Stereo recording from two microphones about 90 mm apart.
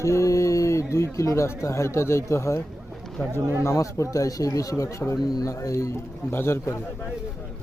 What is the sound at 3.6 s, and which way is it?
A man's voice, 35° left (ahead or behind).